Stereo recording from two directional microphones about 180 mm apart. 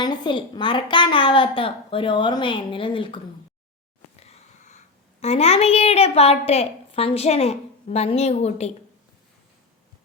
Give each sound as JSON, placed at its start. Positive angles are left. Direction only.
{"t": 0.0, "sound": "a woman's voice", "side_deg": 25}
{"t": 4.2, "sound": "sniff", "side_deg": 40}
{"t": 5.2, "sound": "a woman's voice", "side_deg": 35}